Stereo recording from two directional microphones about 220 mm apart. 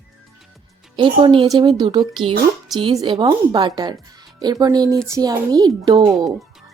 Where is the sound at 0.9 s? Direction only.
20° right (ahead or behind).